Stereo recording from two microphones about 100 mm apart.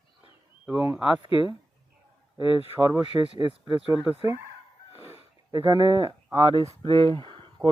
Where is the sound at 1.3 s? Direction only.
55° left (ahead or behind).